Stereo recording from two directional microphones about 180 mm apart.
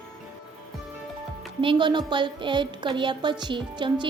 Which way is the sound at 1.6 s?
25° right (ahead or behind).